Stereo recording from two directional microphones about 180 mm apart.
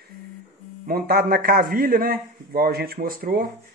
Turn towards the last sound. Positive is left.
turn(degrees=-55)  # may be behind; listen again after turning